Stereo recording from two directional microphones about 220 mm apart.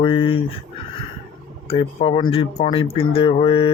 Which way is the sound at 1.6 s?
25° left (ahead or behind).